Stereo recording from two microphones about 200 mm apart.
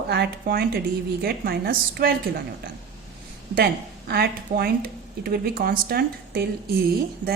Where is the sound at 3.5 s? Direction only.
50° right (ahead or behind).